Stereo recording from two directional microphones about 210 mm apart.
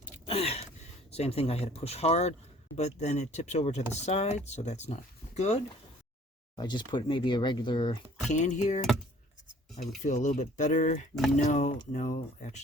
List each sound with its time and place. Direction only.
0.3 s gasp: 30° left (ahead or behind)
1.1 s speech: 30° left (ahead or behind)
6.6 s speech: 20° left (ahead or behind)
8.3 s speech: 35° left (ahead or behind)
10.0 s speech: 35° left (ahead or behind)